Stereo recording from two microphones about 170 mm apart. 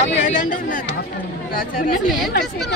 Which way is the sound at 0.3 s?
50° left (ahead or behind).